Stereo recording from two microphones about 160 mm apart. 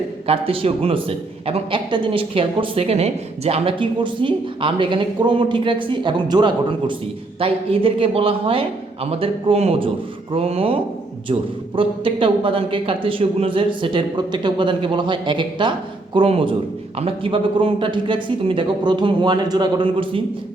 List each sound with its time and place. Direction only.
0.3 s a woman's voice: 35° right (ahead or behind)
11.8 s a woman's voice: 35° right (ahead or behind)